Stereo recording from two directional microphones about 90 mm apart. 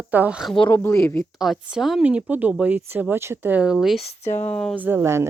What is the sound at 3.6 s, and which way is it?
Speech, 5° right (ahead or behind).